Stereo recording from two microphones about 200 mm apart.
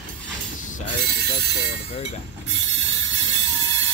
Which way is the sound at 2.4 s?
65° right (ahead or behind).